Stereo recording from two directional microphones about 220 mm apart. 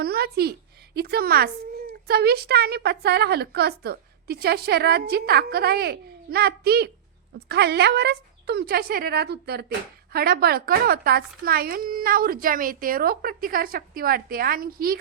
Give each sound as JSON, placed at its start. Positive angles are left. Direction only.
{"t": 0.0, "sound": "a woman's voice", "side_deg": -45}